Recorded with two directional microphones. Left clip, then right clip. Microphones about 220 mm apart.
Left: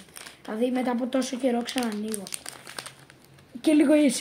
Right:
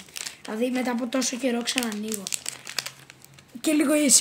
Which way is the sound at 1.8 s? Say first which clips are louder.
Right 1 dB; 35° right (ahead or behind).